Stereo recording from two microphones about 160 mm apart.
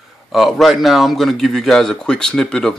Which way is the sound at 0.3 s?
Centre (ahead or behind).